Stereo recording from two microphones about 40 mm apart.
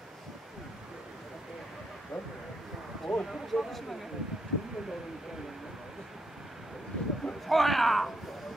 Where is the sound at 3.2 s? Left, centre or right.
Centre.